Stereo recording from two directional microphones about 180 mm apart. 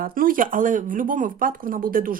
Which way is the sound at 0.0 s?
50° right (ahead or behind).